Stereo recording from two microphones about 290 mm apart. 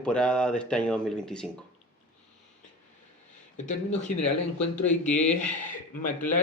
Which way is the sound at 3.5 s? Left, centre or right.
Left.